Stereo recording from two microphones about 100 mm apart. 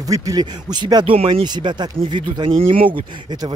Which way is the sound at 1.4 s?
45° right (ahead or behind).